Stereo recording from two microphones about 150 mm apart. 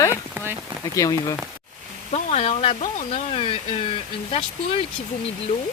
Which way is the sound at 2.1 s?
45° left (ahead or behind).